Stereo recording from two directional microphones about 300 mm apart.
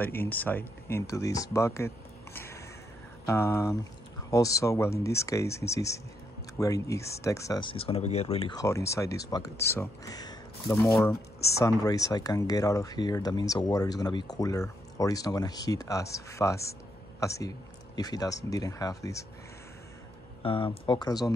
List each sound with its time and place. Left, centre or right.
0.0 s speech: centre
2.3 s a sound: centre
3.3 s speech: centre
20.4 s speech: centre